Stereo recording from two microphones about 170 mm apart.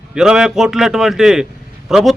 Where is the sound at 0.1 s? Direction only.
5° right (ahead or behind).